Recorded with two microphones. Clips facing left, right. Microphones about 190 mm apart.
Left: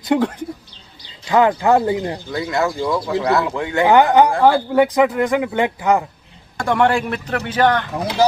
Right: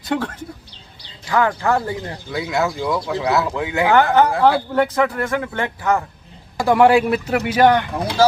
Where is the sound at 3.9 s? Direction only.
15° left (ahead or behind).